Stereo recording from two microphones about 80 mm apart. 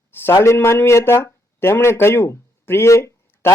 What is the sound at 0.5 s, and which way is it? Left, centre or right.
Speech, left.